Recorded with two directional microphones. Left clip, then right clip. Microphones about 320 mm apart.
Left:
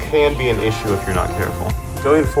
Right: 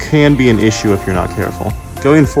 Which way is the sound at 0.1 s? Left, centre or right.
Right.